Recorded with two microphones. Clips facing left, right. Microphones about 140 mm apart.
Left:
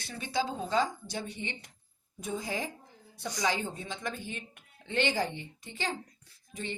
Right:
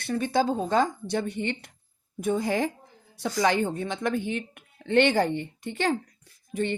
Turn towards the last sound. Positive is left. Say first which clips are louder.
# right 11 dB
turn(degrees=-60)  # may be behind; listen again after turning